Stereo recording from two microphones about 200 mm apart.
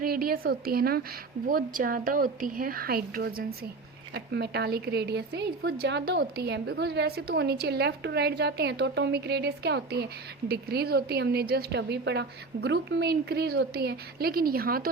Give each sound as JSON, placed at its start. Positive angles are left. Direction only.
{"t": 0.0, "sound": "a woman's voice", "side_deg": -45}